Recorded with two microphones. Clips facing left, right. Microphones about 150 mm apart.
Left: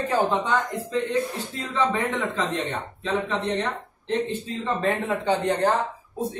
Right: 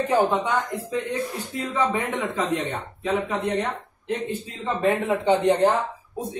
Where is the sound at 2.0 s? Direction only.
15° right (ahead or behind).